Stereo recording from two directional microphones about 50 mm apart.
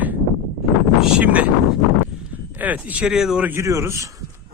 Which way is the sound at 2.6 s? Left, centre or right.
Right.